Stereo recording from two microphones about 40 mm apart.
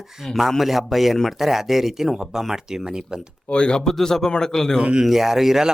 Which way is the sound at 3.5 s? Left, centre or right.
Left.